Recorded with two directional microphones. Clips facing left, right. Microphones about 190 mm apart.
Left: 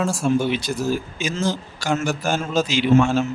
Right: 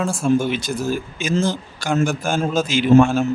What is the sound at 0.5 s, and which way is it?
Speech, 50° right (ahead or behind).